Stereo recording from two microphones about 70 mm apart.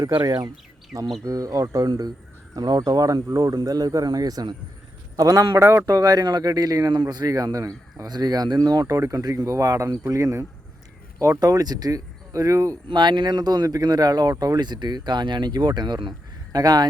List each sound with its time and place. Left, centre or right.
0.0 s speech: right
1.2 s speech: right
1.9 s speech: right
2.8 s speech: right
5.1 s speech: right
5.8 s speech: right
8.0 s speech: right
9.0 s speech: right
11.3 s speech: right
12.9 s speech: right
16.5 s speech: right